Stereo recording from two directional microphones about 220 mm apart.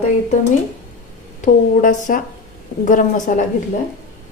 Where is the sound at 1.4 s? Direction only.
35° left (ahead or behind).